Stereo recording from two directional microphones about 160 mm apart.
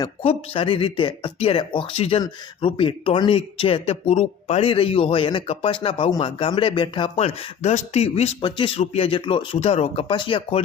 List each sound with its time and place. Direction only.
0.0 s speech: 35° left (ahead or behind)